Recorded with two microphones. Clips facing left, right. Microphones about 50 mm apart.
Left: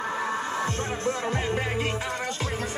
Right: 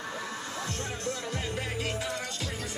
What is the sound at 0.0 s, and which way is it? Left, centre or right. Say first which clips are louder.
Music: left 8 dB; left.